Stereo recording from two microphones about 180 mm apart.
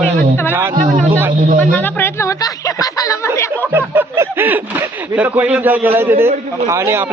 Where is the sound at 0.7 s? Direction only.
45° right (ahead or behind).